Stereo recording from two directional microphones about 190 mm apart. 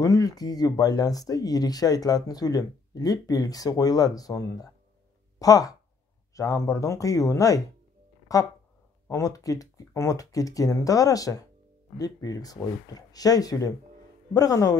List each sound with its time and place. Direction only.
0.0 s speech: 20° left (ahead or behind)